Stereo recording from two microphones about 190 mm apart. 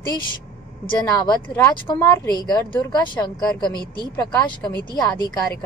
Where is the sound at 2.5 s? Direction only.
20° left (ahead or behind).